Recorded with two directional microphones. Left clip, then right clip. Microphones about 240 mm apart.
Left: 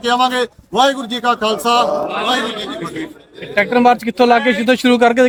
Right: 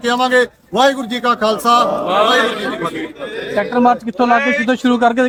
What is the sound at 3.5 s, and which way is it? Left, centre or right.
A man's voice, left.